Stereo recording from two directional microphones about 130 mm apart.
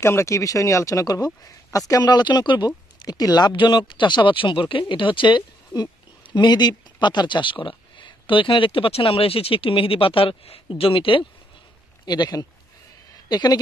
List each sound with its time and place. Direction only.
0.0 s speech: 20° left (ahead or behind); by 11.2 s 40° left (ahead or behind)
12.1 s speech: 30° left (ahead or behind)
13.1 s a sound: 30° left (ahead or behind)